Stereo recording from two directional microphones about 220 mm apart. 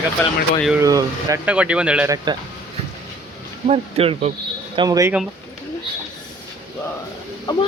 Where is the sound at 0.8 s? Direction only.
15° right (ahead or behind).